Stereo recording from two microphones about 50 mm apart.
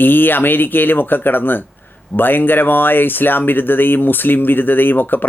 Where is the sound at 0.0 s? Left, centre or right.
Left.